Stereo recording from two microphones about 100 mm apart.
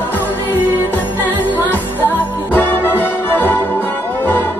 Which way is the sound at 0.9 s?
20° left (ahead or behind).